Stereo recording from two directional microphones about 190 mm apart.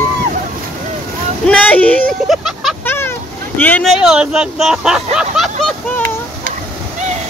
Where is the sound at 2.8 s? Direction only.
10° left (ahead or behind).